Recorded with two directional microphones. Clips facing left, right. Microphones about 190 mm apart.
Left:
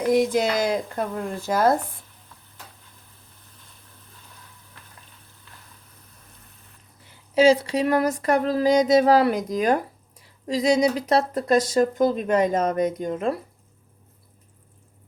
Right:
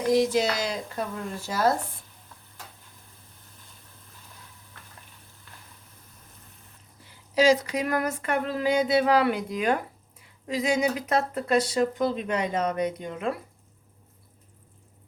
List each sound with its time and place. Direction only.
0.1 s speech: 55° left (ahead or behind)
7.3 s speech: 30° left (ahead or behind)